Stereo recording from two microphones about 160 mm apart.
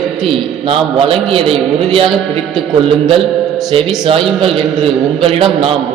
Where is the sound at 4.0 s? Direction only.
35° right (ahead or behind).